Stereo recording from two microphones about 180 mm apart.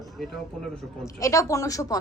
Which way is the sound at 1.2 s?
15° left (ahead or behind).